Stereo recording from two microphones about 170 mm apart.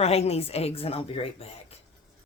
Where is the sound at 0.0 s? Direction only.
40° left (ahead or behind).